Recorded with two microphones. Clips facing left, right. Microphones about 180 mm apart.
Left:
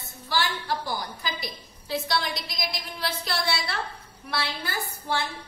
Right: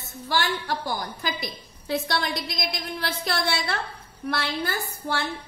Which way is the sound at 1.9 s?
55° right (ahead or behind).